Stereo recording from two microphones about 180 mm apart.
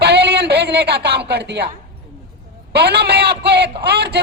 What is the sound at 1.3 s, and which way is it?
Speech, 65° right (ahead or behind).